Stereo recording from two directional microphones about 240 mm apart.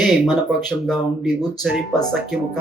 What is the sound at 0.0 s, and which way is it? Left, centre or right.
Speech, centre.